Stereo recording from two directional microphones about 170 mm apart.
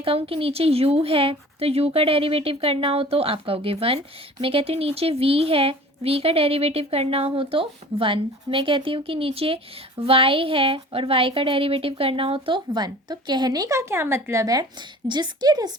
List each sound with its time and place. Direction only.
0.0 s a woman's voice: 35° right (ahead or behind)